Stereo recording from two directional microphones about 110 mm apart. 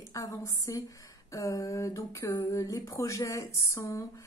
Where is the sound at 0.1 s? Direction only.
30° left (ahead or behind).